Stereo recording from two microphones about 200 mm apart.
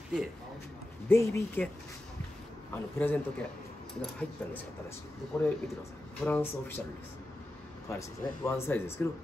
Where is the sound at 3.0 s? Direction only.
10° left (ahead or behind).